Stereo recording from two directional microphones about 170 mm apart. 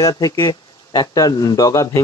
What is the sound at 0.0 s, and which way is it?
Speech, 20° left (ahead or behind).